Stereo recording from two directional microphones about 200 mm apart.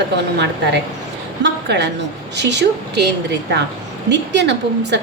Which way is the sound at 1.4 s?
60° right (ahead or behind).